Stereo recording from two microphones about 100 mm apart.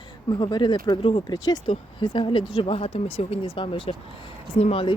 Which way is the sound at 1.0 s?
70° left (ahead or behind).